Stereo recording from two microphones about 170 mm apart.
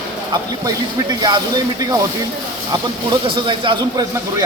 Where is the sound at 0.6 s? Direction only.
25° right (ahead or behind).